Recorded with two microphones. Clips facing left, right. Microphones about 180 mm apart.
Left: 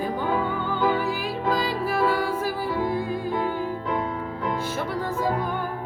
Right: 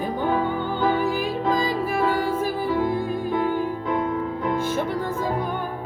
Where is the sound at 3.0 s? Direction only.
50° right (ahead or behind).